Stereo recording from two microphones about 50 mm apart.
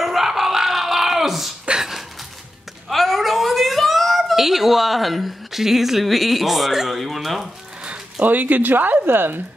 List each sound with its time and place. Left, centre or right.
0.0 s dog: centre
1.7 s a sound: centre
2.9 s a child's voice: centre
7.8 s music: right
8.3 s speech: right